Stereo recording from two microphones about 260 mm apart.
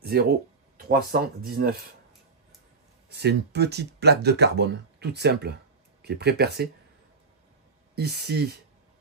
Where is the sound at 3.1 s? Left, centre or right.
Right.